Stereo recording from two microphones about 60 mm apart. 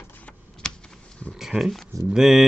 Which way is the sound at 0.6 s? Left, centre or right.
Centre.